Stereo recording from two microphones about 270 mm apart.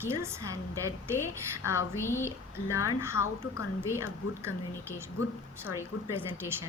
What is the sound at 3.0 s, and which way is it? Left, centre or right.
A woman's voice, centre.